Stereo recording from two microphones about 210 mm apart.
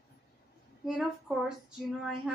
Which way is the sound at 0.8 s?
Centre (ahead or behind).